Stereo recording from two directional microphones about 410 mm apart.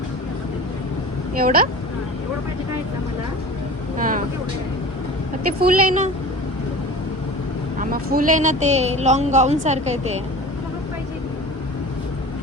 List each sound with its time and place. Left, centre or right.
1.4 s speech: right
3.9 s speech: centre
5.5 s speech: centre
7.8 s speech: centre